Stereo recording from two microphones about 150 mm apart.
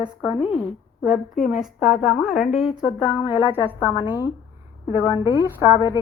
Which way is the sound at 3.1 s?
10° right (ahead or behind).